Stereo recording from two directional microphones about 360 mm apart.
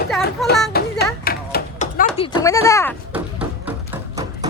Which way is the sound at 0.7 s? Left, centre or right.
Left.